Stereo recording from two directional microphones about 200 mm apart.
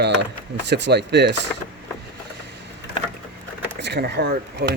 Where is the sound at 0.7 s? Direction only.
55° right (ahead or behind).